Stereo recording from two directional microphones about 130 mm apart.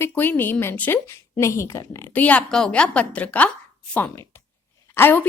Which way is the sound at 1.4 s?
20° left (ahead or behind).